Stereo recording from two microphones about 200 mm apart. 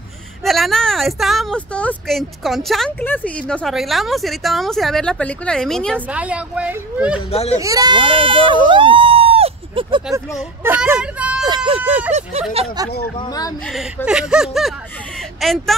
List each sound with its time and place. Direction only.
0.4 s a woman's voice: centre (ahead or behind)
7.2 s speech: 30° left (ahead or behind)
7.5 s speech: 15° right (ahead or behind)
10.1 s speech: 10° right (ahead or behind)
11.4 s speech: 25° right (ahead or behind)
13.0 s speech: 20° left (ahead or behind)
14.0 s a woman's voice: 5° right (ahead or behind)